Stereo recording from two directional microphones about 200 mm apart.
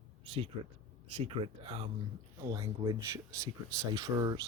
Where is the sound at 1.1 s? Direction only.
25° right (ahead or behind).